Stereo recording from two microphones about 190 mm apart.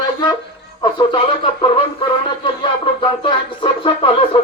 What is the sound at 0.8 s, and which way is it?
A man's voice, 25° left (ahead or behind).